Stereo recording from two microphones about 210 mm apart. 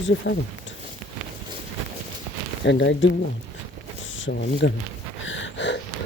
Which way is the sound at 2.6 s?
60° left (ahead or behind).